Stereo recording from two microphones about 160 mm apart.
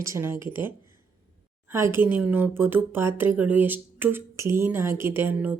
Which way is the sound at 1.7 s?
15° right (ahead or behind).